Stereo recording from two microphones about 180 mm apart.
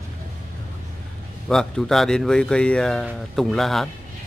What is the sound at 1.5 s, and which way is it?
Speech, centre (ahead or behind).